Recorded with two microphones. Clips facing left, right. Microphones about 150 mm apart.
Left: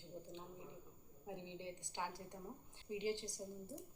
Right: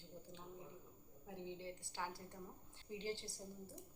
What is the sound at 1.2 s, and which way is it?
A woman's voice, 20° left (ahead or behind).